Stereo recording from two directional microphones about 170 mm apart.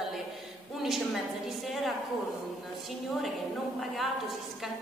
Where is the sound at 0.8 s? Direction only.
Centre (ahead or behind).